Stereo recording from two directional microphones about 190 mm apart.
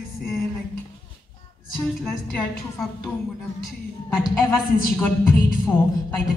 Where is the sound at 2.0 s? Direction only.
5° left (ahead or behind).